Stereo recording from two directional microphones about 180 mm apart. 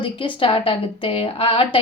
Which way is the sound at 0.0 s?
30° left (ahead or behind).